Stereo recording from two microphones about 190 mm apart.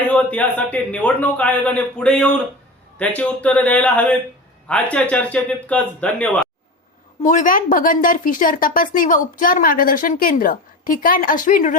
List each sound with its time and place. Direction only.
0.1 s a man's voice: 5° left (ahead or behind)
7.2 s a woman's voice: 40° left (ahead or behind)